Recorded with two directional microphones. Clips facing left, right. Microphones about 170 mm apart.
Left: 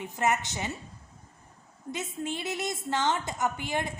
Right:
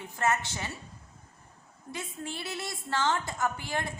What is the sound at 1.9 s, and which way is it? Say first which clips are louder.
A woman's voice: left 4 dB; 20° left (ahead or behind).